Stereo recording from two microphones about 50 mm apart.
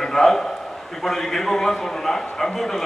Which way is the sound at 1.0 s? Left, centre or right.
Centre.